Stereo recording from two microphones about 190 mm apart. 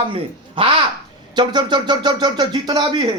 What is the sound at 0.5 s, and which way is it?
Speech, 30° right (ahead or behind).